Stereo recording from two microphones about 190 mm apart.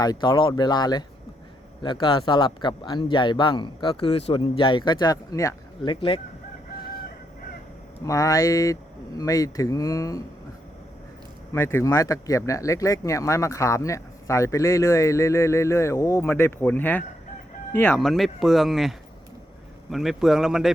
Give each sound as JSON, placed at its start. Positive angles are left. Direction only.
{"t": 0.0, "sound": "speech", "side_deg": 20}
{"t": 8.0, "sound": "speech", "side_deg": 15}
{"t": 11.5, "sound": "speech", "side_deg": 15}